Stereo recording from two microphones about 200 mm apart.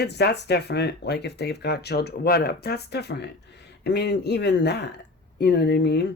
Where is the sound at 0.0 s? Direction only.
55° left (ahead or behind).